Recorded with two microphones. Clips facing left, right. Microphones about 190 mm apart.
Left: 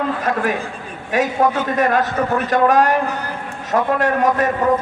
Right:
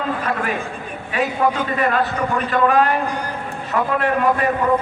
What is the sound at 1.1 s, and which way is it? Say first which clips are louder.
A man's voice: left 3 dB; 45° left (ahead or behind).